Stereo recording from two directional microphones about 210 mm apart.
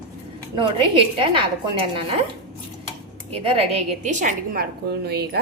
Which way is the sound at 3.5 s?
30° right (ahead or behind).